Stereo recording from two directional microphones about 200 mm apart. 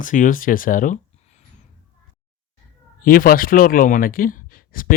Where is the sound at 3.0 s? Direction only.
45° left (ahead or behind).